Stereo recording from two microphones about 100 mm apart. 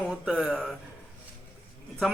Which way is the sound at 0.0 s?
10° right (ahead or behind).